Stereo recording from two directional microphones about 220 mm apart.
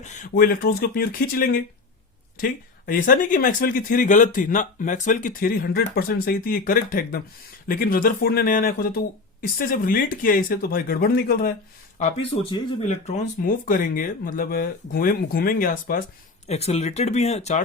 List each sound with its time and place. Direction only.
0.0 s speech: 35° left (ahead or behind)
11.9 s speech: 30° left (ahead or behind)